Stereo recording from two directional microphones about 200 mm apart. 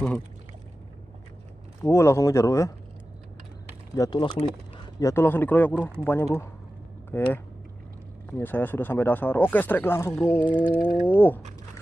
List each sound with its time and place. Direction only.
1.8 s speech: 15° left (ahead or behind)
3.9 s speech: 20° left (ahead or behind)
10.4 s speech: 25° left (ahead or behind)
10.7 s speech: 10° left (ahead or behind)